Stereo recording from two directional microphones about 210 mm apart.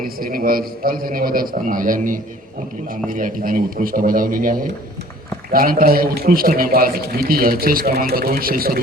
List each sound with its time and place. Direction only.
0.0 s a man's voice: 45° right (ahead or behind)